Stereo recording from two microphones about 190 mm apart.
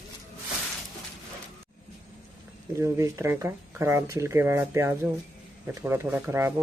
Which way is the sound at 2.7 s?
15° right (ahead or behind).